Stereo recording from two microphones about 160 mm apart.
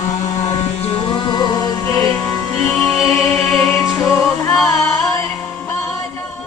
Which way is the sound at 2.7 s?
Centre (ahead or behind).